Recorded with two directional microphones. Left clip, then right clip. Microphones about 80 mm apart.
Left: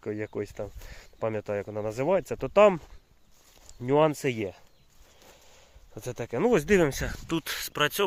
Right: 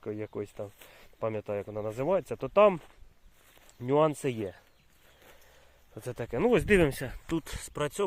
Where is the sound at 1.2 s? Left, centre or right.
Left.